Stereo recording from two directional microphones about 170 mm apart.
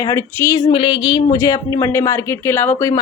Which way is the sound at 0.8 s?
30° left (ahead or behind).